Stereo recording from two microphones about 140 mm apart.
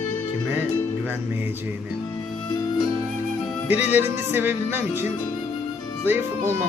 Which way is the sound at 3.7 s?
15° right (ahead or behind).